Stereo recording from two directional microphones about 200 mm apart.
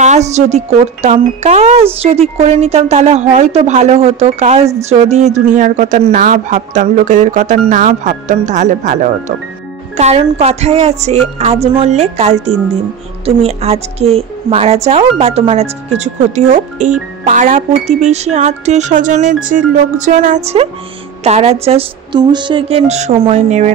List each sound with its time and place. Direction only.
0.0 s a woman's voice: 35° right (ahead or behind)